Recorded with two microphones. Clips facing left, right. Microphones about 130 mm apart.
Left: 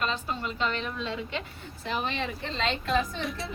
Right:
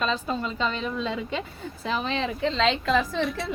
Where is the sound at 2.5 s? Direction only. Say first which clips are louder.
Right 3 dB; 90° right.